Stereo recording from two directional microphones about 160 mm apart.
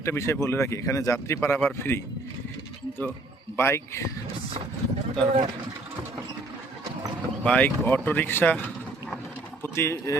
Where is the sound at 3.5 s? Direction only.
15° left (ahead or behind).